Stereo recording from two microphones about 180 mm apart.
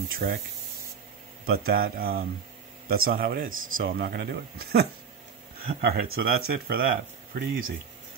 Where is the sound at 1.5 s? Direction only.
55° right (ahead or behind).